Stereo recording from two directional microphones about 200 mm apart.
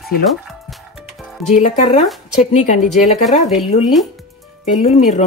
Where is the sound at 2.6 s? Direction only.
35° left (ahead or behind).